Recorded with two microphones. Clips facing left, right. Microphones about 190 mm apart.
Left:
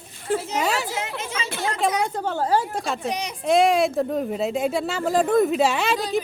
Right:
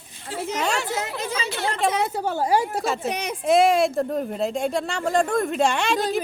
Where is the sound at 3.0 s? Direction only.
55° right (ahead or behind).